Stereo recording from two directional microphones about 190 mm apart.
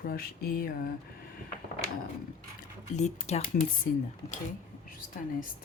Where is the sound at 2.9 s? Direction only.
35° left (ahead or behind).